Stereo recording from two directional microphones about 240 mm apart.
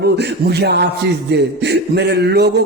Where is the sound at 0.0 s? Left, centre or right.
Right.